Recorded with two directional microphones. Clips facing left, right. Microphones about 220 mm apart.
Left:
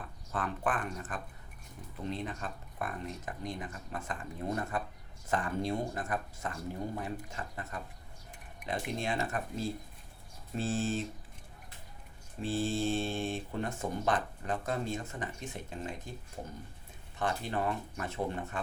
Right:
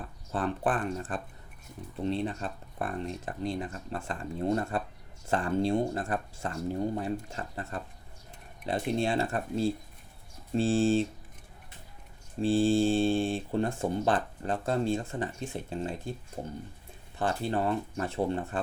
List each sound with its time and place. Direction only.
0.3 s speech: 30° right (ahead or behind)
12.4 s speech: 30° right (ahead or behind)
17.2 s speech: 30° right (ahead or behind)